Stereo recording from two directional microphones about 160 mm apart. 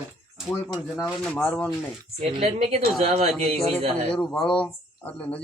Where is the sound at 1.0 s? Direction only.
10° left (ahead or behind).